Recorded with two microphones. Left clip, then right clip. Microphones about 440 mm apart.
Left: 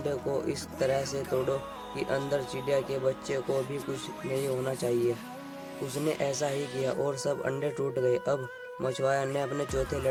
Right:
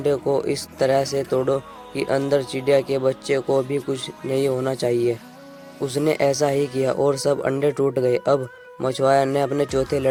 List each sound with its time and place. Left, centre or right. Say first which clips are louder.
0.0 s speech: right 10 dB; left